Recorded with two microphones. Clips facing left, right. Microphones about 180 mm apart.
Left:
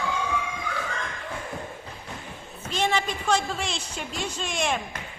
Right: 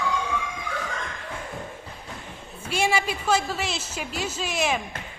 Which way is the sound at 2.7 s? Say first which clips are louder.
Right 1 dB; 10° right (ahead or behind).